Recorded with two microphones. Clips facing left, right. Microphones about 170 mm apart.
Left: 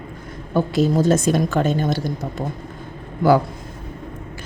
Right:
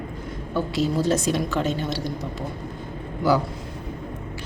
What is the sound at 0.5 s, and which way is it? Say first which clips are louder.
A woman's voice: left 5 dB; 50° left (ahead or behind).